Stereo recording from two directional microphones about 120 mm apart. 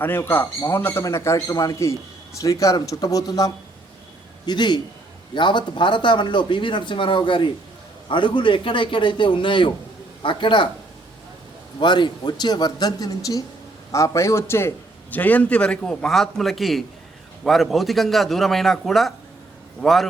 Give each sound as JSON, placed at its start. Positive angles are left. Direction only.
{"t": 0.0, "sound": "a man's voice", "side_deg": 20}
{"t": 11.8, "sound": "a man's voice", "side_deg": 40}